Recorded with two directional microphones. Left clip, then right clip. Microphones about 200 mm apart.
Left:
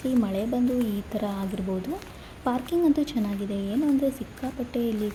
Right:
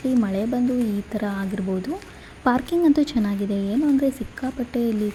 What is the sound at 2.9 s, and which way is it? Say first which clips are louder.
Speech: right 5 dB; 90° right.